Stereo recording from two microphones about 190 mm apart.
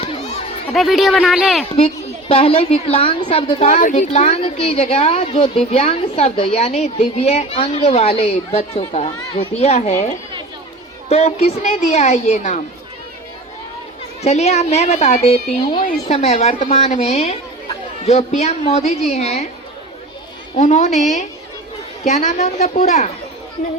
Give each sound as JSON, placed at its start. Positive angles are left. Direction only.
{"t": 0.7, "sound": "speech", "side_deg": 0}
{"t": 1.7, "sound": "a woman's voice", "side_deg": 30}
{"t": 14.2, "sound": "a woman's voice", "side_deg": 35}
{"t": 20.6, "sound": "a woman's voice", "side_deg": 40}
{"t": 22.0, "sound": "a woman's voice", "side_deg": 40}